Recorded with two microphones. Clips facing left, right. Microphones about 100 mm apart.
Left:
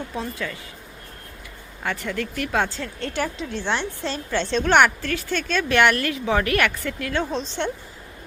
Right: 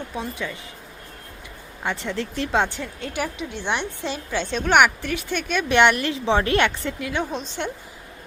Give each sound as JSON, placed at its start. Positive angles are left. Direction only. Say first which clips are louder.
{"t": 0.2, "sound": "speech", "louder": "even", "side_deg": -15}
{"t": 1.8, "sound": "speech", "louder": "even", "side_deg": -20}